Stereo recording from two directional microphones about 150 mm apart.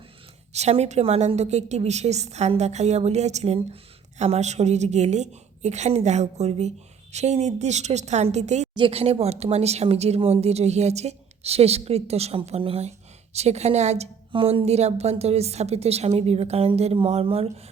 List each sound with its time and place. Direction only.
0.5 s a woman's voice: 45° right (ahead or behind)
8.7 s a woman's voice: 35° right (ahead or behind)